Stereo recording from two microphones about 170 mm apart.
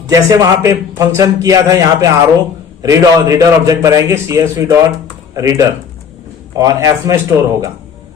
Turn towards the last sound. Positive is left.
turn(degrees=-20)  # may be behind; listen again after turning